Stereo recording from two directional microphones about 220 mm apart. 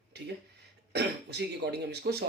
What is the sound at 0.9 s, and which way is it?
Speech, 50° right (ahead or behind).